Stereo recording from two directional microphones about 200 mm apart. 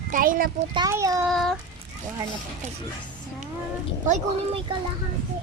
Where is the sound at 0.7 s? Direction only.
15° right (ahead or behind).